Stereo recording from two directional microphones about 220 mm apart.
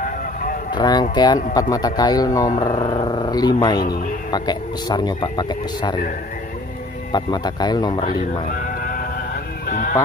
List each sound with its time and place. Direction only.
0.0 s a sound: 40° left (ahead or behind)
0.7 s speech: 20° left (ahead or behind)
7.1 s speech: 20° left (ahead or behind)
8.5 s bleat: 40° left (ahead or behind)
9.7 s fowl: 35° left (ahead or behind)